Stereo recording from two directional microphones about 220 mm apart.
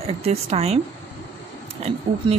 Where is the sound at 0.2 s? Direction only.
30° right (ahead or behind).